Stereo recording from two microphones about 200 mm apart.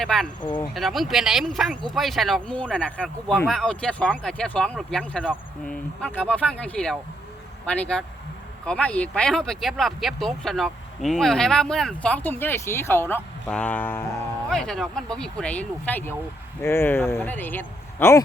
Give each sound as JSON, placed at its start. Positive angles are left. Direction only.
{"t": 0.0, "sound": "a man's voice", "side_deg": 0}